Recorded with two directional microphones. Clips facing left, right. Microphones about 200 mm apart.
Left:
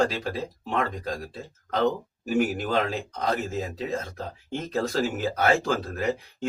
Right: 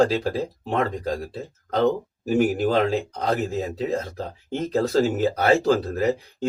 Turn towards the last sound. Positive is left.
turn(degrees=-35)  # may be behind; listen again after turning